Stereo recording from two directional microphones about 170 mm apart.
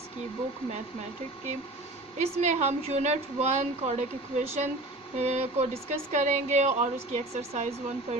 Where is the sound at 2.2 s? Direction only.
40° right (ahead or behind).